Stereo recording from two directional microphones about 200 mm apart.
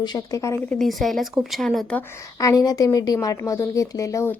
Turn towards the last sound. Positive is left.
turn(degrees=15)  # may be behind; listen again after turning